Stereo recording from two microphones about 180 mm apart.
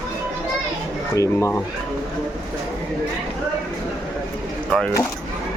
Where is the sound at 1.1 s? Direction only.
15° left (ahead or behind).